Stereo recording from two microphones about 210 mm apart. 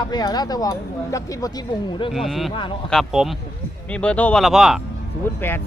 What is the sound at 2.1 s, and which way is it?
Speech, centre (ahead or behind).